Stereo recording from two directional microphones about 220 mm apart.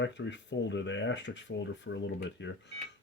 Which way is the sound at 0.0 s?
55° left (ahead or behind).